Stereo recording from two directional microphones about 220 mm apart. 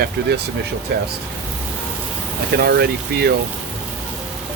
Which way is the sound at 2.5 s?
45° right (ahead or behind).